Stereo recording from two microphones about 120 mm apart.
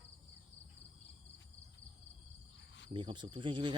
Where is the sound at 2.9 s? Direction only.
40° right (ahead or behind).